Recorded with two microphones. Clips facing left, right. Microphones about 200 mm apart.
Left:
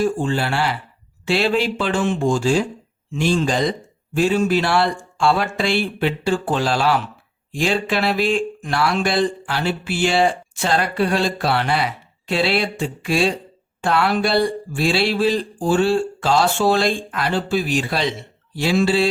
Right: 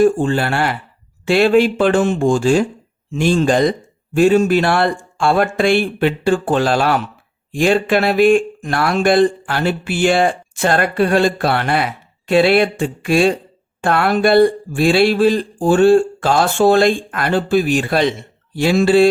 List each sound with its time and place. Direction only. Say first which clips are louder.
0.0 s speech: right 6 dB; 55° right (ahead or behind)